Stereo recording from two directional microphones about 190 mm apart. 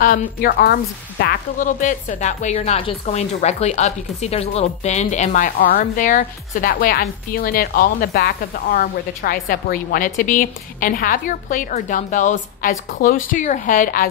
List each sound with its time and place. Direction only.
0.0 s a woman's voice: 50° left (ahead or behind)